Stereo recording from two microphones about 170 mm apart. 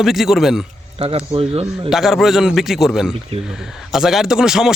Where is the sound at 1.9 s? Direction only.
Centre (ahead or behind).